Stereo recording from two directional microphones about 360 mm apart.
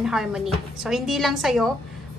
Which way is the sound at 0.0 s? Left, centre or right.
Centre.